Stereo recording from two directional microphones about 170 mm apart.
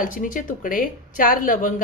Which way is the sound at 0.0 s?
50° left (ahead or behind).